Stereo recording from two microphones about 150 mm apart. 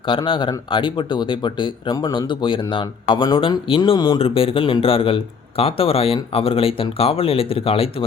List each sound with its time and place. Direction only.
0.3 s speech: 35° left (ahead or behind)
4.2 s speech: 40° left (ahead or behind)